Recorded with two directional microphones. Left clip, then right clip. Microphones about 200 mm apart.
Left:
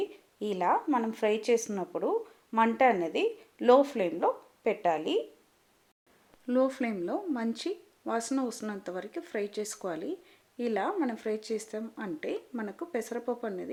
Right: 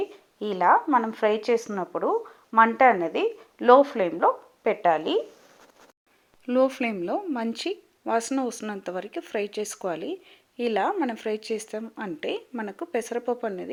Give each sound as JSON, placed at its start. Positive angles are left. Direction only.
{"t": 0.1, "sound": "speech", "side_deg": -10}
{"t": 6.5, "sound": "speech", "side_deg": -15}